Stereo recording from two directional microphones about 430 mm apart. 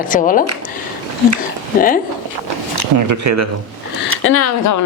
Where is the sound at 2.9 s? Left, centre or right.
Right.